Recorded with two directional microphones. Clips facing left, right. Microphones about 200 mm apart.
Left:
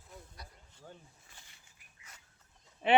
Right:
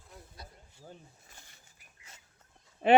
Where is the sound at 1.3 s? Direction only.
45° right (ahead or behind).